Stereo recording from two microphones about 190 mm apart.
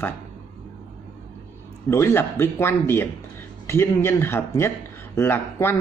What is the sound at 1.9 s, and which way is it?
Speech, 15° left (ahead or behind).